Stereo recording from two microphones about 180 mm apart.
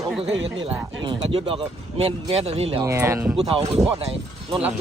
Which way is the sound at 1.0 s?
30° right (ahead or behind).